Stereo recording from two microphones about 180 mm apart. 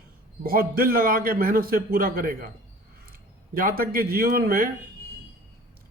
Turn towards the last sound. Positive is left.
turn(degrees=-55)  # may be behind; listen again after turning